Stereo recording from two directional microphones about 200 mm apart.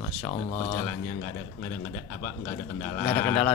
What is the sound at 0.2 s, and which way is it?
Speech, 30° left (ahead or behind).